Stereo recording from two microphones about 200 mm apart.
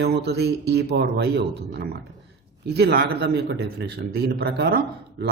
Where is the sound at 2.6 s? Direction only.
55° right (ahead or behind).